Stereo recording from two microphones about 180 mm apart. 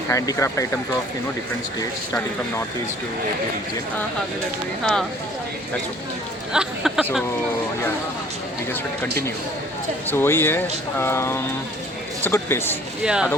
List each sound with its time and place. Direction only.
0.1 s speech: 20° left (ahead or behind)
4.8 s speech: 5° left (ahead or behind)
6.5 s speech: 5° right (ahead or behind)
10.1 s speech: 10° left (ahead or behind)
13.1 s speech: 5° right (ahead or behind)